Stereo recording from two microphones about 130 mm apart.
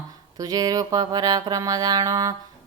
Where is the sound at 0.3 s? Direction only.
30° right (ahead or behind).